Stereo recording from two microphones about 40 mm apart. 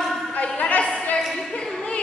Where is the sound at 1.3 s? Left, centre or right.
Centre.